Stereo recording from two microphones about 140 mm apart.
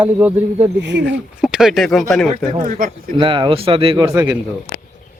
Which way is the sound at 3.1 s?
35° right (ahead or behind).